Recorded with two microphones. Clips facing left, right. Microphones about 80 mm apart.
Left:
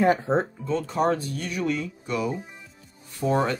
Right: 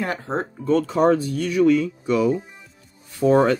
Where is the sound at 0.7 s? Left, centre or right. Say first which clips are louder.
Right 8 dB; right.